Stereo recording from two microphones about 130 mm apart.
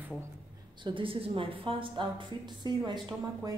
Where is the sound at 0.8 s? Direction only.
40° right (ahead or behind).